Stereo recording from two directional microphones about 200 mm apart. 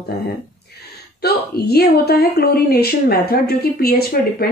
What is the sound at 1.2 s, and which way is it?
A woman's voice, 50° left (ahead or behind).